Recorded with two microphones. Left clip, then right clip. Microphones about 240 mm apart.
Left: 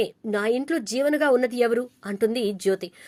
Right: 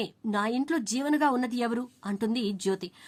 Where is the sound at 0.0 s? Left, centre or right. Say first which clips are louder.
Left 5 dB; centre.